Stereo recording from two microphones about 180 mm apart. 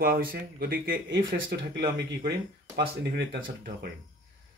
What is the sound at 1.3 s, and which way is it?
Speech, 75° right (ahead or behind).